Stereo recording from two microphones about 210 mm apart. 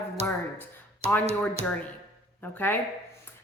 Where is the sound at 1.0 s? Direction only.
30° right (ahead or behind).